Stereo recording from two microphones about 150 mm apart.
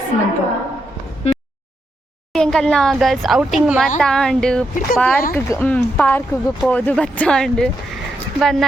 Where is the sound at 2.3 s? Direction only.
5° left (ahead or behind).